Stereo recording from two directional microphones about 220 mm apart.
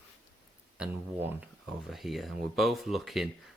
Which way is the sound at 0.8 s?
5° right (ahead or behind).